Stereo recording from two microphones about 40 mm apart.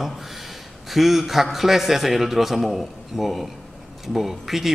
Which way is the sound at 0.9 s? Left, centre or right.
Centre.